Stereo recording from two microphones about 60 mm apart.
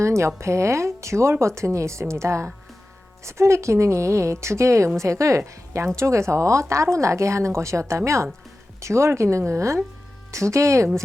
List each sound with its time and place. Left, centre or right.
0.0 s a woman's voice: right